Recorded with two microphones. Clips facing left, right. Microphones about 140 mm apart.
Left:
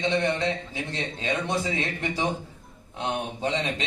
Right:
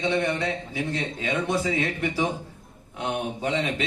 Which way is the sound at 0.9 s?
25° left (ahead or behind).